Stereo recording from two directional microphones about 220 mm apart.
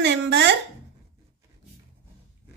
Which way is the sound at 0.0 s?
55° right (ahead or behind).